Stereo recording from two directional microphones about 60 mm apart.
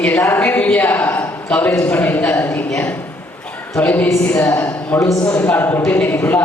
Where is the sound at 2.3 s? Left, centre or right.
Left.